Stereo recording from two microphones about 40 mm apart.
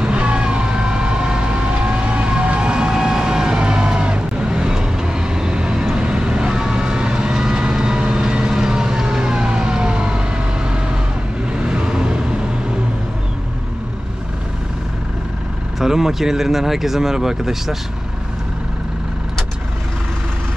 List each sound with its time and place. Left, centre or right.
0.0 s vehicle: right
15.8 s speech: centre